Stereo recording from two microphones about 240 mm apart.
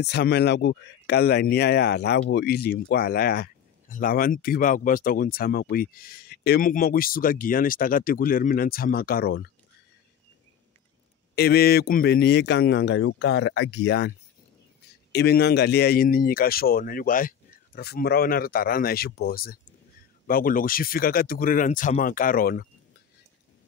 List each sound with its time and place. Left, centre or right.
0.0 s speech: left
11.3 s a man's voice: left
15.1 s speech: left